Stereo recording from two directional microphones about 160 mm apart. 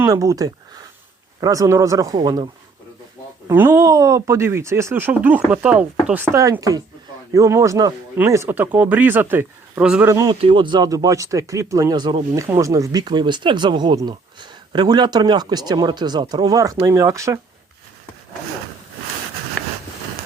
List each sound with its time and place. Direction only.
0.0 s speech: 20° right (ahead or behind)
3.4 s speech: 15° right (ahead or behind)
6.3 s speech: 20° right (ahead or behind)
10.1 s speech: 20° right (ahead or behind)
10.4 s speech: 30° right (ahead or behind)